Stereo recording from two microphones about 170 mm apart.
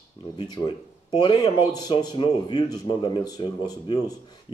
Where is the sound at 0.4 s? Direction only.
25° left (ahead or behind).